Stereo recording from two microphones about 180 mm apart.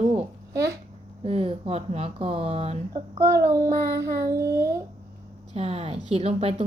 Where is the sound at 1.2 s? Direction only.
30° right (ahead or behind).